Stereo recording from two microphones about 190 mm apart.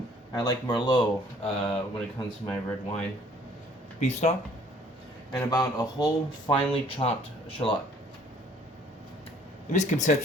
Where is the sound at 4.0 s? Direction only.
35° left (ahead or behind).